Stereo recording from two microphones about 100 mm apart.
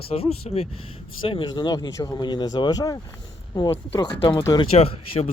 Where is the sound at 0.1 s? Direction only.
75° left (ahead or behind).